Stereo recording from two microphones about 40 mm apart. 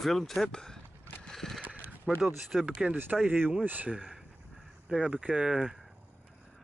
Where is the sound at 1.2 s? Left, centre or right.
Centre.